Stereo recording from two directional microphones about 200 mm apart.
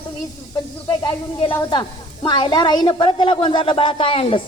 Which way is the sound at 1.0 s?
20° left (ahead or behind).